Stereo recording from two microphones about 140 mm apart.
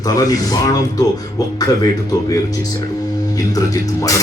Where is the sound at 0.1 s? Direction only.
25° left (ahead or behind).